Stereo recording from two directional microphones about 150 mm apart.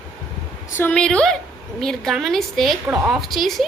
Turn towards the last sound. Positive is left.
turn(degrees=0)  # may be behind; listen again after turning